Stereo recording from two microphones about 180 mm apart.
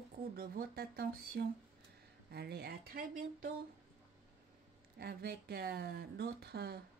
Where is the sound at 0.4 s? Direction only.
60° right (ahead or behind).